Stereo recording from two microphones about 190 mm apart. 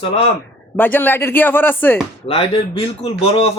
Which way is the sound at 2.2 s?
30° left (ahead or behind).